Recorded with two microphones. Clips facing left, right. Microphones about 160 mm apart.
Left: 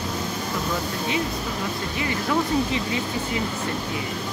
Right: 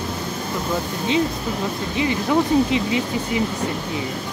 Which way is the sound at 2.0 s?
20° right (ahead or behind).